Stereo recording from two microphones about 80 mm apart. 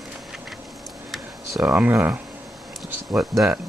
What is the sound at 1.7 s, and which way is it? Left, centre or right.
Speech, right.